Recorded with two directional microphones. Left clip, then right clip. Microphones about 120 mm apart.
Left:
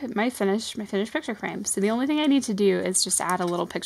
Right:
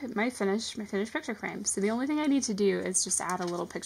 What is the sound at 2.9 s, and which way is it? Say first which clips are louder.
Speech: left 5 dB; 75° left (ahead or behind).